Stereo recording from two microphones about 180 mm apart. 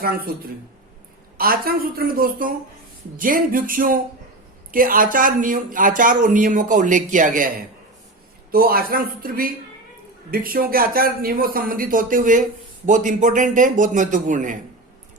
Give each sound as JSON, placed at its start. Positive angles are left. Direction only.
{"t": 0.0, "sound": "a woman's voice", "side_deg": -55}
{"t": 1.4, "sound": "a woman's voice", "side_deg": -55}
{"t": 8.5, "sound": "speech", "side_deg": -55}